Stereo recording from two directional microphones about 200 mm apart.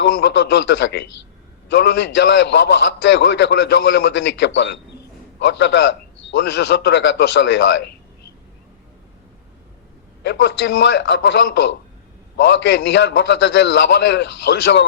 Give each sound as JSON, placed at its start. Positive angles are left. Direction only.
{"t": 0.0, "sound": "a man's voice", "side_deg": 60}
{"t": 10.2, "sound": "a man's voice", "side_deg": 60}